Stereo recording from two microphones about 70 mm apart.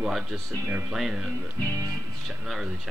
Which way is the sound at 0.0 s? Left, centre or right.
Centre.